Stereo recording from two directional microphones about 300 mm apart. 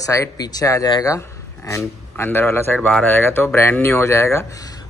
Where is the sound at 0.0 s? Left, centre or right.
Centre.